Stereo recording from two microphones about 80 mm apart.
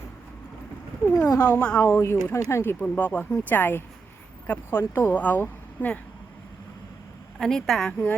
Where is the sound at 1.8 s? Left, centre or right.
Left.